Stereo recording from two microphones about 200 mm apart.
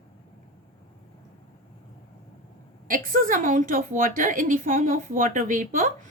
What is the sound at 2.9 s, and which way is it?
A woman's voice, 40° right (ahead or behind).